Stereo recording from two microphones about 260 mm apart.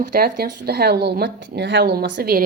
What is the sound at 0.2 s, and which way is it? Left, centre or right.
Speech, right.